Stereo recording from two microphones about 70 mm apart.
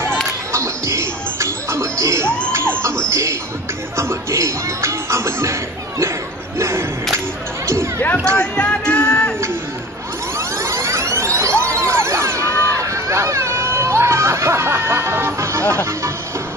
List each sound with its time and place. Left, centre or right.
0.5 s music: right
6.6 s whip: right
7.6 s a sound: right
8.4 s music: centre
10.6 s music: right
12.7 s a sound: right
15.7 s speech: right